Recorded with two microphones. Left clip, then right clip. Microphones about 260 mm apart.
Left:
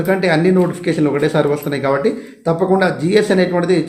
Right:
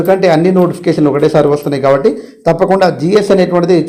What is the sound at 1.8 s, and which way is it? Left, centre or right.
Speech, centre.